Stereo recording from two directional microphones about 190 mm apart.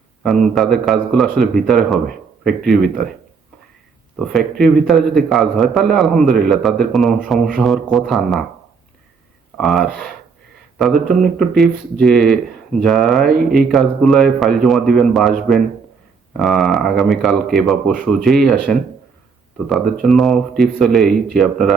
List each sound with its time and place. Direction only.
0.2 s a man's voice: centre (ahead or behind)
4.2 s a man's voice: centre (ahead or behind)
9.6 s a man's voice: centre (ahead or behind)